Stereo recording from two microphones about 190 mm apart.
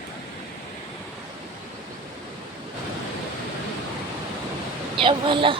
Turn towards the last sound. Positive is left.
turn(degrees=-25)  # may be behind; listen again after turning